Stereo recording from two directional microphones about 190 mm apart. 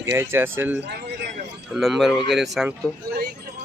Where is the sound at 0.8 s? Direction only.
60° right (ahead or behind).